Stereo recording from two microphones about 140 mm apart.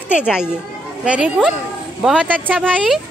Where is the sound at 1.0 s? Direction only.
10° right (ahead or behind).